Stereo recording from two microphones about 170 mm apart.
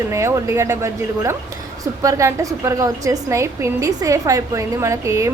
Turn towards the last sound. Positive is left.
turn(degrees=-20)  # may be behind; listen again after turning